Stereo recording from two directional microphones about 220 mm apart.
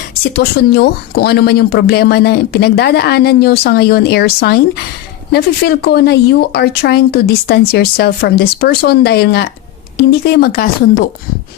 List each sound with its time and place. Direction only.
0.1 s speech: 45° left (ahead or behind)